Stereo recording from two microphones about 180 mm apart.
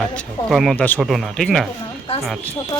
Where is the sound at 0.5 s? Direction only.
Centre (ahead or behind).